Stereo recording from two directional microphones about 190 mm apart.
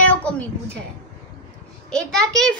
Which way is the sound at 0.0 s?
10° left (ahead or behind).